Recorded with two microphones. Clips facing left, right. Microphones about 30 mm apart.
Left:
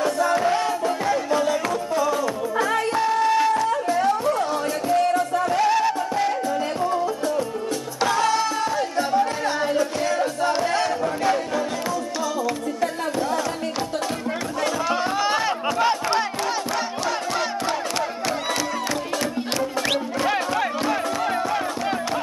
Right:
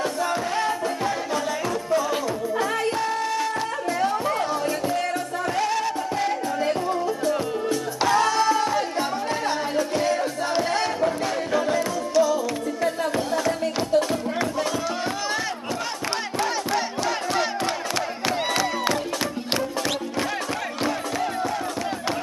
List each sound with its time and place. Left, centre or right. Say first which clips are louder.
0.8 s music: left 3 dB; centre
1.5 s music: left 1 dB; centre
2.9 s music: left 5 dB; centre
3.9 s chatter: left 1 dB; centre
5.4 s music: left 2 dB; centre
8.0 s music: even; centre
9.8 s music: left 1 dB; centre
14.6 s crowd: left 3 dB; centre
16.7 s battle cry: even; centre
20.9 s music: left 3 dB; centre